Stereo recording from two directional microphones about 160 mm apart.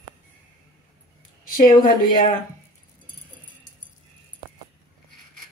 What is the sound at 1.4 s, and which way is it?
Speech, 60° left (ahead or behind).